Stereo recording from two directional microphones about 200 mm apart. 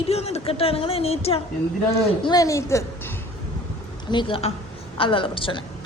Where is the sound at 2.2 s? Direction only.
20° left (ahead or behind).